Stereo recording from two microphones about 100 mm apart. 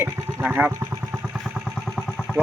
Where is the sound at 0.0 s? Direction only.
15° right (ahead or behind).